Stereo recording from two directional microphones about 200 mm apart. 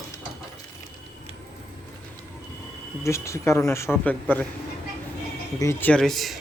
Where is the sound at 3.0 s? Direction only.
15° left (ahead or behind).